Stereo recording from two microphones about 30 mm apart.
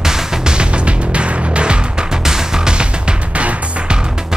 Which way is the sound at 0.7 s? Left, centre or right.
Right.